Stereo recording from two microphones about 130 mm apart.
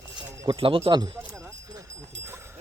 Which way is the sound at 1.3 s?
25° right (ahead or behind).